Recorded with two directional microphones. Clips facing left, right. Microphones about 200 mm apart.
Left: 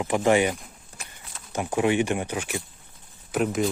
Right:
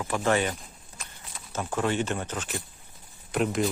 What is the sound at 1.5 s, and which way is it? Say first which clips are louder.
Speech: left 5 dB; 15° left (ahead or behind).